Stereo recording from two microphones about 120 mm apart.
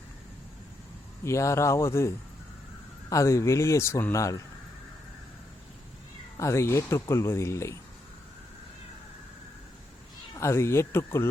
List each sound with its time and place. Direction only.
1.2 s speech: 25° left (ahead or behind)
6.3 s speech: 25° left (ahead or behind)
10.3 s speech: 25° left (ahead or behind)